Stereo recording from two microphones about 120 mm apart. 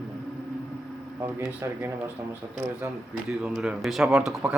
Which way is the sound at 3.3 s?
5° right (ahead or behind).